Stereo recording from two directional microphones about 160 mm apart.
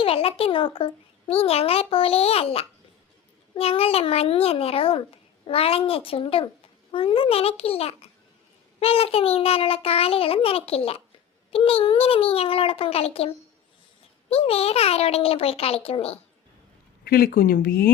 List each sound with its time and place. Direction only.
0.0 s a child's voice: 35° left (ahead or behind)
17.0 s speech: 75° left (ahead or behind)